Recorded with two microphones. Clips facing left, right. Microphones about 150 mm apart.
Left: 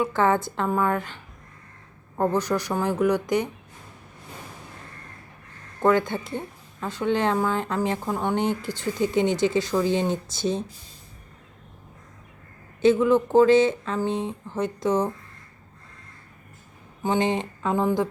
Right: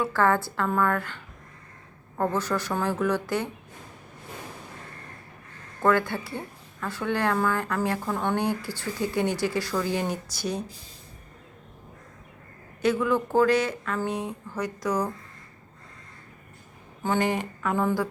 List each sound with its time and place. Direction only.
0.0 s a woman's voice: 20° left (ahead or behind)
5.8 s a woman's voice: 20° left (ahead or behind)
12.8 s a woman's voice: 20° left (ahead or behind)
17.0 s a woman's voice: 20° left (ahead or behind)